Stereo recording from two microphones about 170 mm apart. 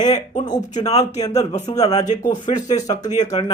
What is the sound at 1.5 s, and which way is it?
Speech, 45° left (ahead or behind).